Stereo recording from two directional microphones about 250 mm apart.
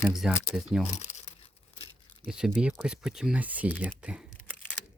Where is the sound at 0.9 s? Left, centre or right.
Left.